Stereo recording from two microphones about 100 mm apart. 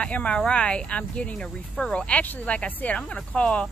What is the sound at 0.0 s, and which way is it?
Speech, 10° left (ahead or behind).